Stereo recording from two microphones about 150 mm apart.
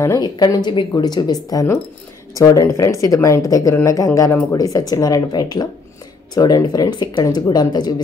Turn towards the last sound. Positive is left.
turn(degrees=25)  # may be behind; listen again after turning